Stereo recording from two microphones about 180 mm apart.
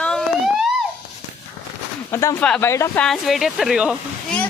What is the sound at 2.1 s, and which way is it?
Speech, 15° left (ahead or behind).